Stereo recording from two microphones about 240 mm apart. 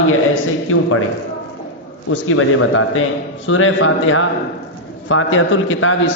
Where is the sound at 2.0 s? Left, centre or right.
Left.